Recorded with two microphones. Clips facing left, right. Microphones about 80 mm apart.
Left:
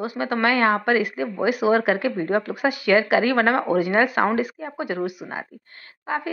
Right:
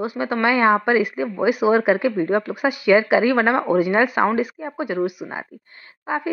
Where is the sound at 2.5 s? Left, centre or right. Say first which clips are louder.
Right 3 dB; centre.